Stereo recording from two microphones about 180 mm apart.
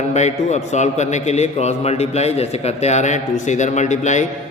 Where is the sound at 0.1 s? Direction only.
40° left (ahead or behind).